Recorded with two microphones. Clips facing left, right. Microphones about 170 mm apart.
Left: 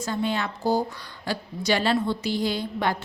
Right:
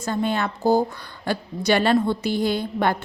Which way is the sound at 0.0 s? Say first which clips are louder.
Right 3 dB; 50° right (ahead or behind).